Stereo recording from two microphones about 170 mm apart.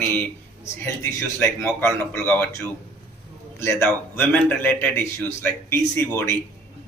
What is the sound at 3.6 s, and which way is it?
A man's voice, 15° left (ahead or behind).